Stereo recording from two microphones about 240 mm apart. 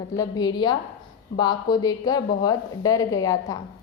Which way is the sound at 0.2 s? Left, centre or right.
Centre.